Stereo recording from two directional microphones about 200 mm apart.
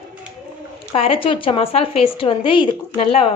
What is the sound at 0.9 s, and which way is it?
Speech, 30° left (ahead or behind).